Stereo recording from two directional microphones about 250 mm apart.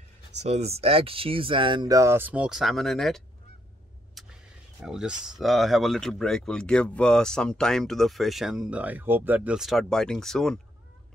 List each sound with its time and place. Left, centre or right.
0.4 s speech: right; by 3.2 s centre
4.2 s vehicle: centre
4.8 s speech: centre